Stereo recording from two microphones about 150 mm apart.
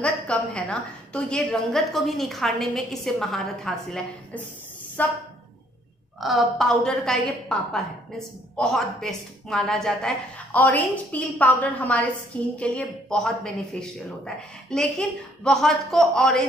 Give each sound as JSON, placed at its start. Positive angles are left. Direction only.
{"t": 0.0, "sound": "a woman's voice", "side_deg": 5}
{"t": 6.1, "sound": "a woman's voice", "side_deg": 0}